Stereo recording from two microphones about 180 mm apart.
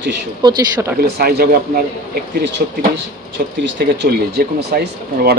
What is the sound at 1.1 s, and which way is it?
Speech, 60° right (ahead or behind).